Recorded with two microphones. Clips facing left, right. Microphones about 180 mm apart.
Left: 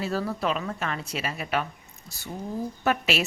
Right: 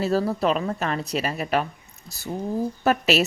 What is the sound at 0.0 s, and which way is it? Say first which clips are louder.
A woman's voice: right 6 dB; 40° right (ahead or behind).